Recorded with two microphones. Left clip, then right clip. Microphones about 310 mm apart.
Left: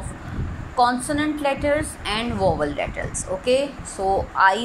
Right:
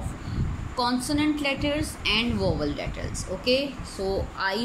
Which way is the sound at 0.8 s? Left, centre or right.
Centre.